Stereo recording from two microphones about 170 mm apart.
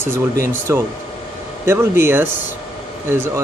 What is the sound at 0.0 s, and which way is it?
Speech, 15° right (ahead or behind).